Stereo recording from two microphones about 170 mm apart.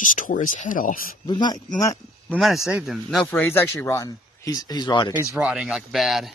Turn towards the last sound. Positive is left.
turn(degrees=0)  # may be behind; listen again after turning